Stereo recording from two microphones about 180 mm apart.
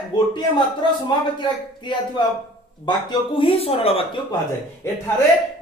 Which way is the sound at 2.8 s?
25° left (ahead or behind).